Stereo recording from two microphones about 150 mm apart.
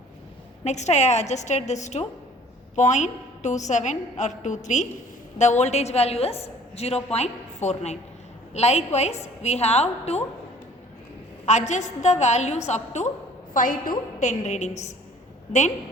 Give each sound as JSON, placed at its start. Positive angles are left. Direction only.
{"t": 0.6, "sound": "a woman's voice", "side_deg": 50}
{"t": 11.4, "sound": "a woman's voice", "side_deg": 50}
{"t": 13.5, "sound": "a woman's voice", "side_deg": 65}
{"t": 14.2, "sound": "a woman's voice", "side_deg": 50}